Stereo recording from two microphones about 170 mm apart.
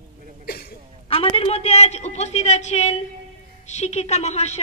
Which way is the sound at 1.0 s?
35° left (ahead or behind).